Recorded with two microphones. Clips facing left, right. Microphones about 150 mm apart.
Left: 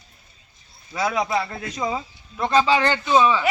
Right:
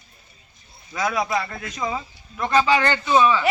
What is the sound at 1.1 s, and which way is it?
Speech, 25° left (ahead or behind).